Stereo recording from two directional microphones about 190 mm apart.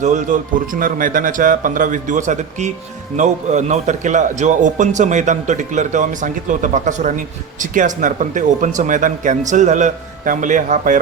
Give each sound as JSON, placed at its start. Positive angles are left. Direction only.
{"t": 0.0, "sound": "a man's voice", "side_deg": -40}